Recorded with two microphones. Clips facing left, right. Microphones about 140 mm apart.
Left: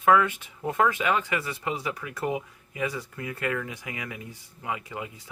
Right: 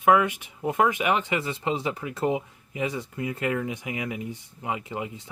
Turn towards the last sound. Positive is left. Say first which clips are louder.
# right 3 dB
turn(degrees=-25)  # may be behind; listen again after turning